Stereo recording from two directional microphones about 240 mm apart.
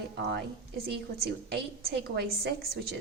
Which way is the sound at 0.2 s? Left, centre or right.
Right.